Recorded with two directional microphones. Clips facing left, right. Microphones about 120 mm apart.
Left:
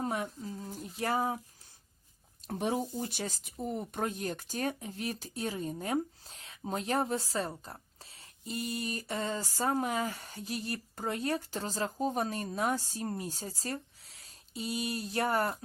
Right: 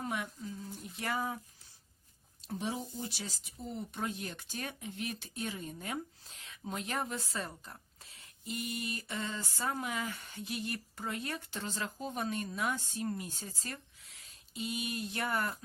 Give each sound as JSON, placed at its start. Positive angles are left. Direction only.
{"t": 0.0, "sound": "speech", "side_deg": 35}
{"t": 2.5, "sound": "speech", "side_deg": 55}